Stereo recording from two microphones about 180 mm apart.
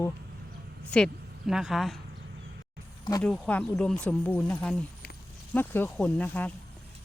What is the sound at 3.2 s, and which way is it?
Speech, 5° left (ahead or behind).